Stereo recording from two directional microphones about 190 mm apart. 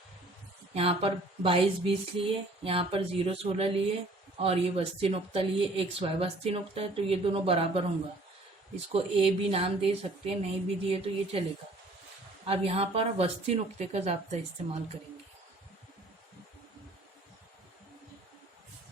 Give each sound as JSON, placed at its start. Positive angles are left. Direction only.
{"t": 0.7, "sound": "speech", "side_deg": -30}
{"t": 8.9, "sound": "speech", "side_deg": -30}
{"t": 12.5, "sound": "speech", "side_deg": -30}